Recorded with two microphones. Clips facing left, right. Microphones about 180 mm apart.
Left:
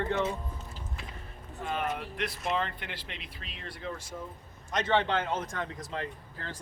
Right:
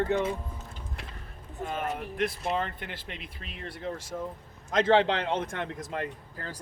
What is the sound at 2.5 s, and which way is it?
Speech, 45° right (ahead or behind).